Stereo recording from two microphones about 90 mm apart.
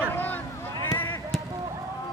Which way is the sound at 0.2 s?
20° left (ahead or behind).